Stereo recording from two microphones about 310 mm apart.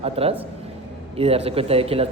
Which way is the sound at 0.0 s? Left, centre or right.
Centre.